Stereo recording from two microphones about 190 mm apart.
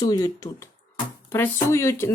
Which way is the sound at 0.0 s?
20° left (ahead or behind).